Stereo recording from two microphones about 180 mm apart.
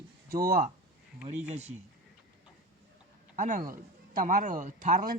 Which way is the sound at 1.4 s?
40° right (ahead or behind).